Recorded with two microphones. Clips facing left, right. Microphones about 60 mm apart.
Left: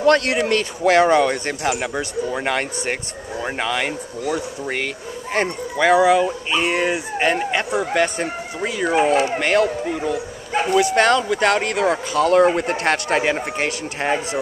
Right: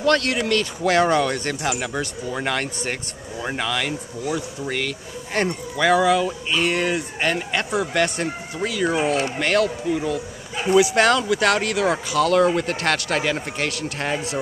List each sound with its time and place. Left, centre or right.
0.0 s speech: left
6.6 s speech: centre
9.0 s speech: left
9.4 s speech: centre
10.7 s speech: centre
11.0 s speech: centre
12.2 s speech: left